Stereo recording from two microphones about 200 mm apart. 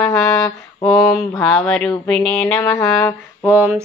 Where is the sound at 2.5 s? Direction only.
15° left (ahead or behind).